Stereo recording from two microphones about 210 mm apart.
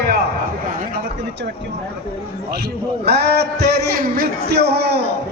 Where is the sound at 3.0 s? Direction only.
50° right (ahead or behind).